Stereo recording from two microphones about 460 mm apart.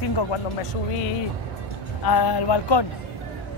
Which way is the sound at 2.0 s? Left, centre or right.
Left.